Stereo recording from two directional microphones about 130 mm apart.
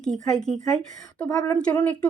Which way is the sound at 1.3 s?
25° left (ahead or behind).